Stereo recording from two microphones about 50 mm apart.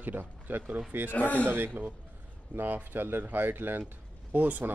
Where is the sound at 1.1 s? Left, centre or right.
Left.